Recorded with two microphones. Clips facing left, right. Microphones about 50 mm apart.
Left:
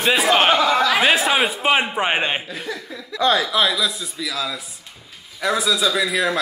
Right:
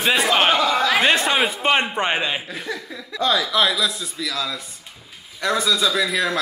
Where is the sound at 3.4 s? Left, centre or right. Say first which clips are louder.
Even; centre.